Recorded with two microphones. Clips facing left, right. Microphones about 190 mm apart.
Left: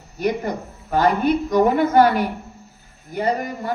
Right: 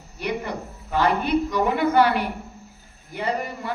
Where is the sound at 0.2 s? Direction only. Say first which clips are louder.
Left 5 dB; 45° left (ahead or behind).